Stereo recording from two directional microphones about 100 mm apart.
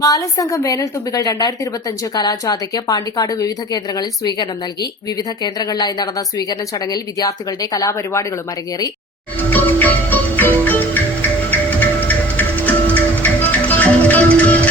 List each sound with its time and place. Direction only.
0.0 s speech: 35° left (ahead or behind)
9.5 s music: 15° left (ahead or behind)